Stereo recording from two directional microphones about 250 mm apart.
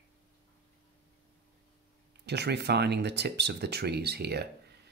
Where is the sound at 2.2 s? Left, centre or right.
Right.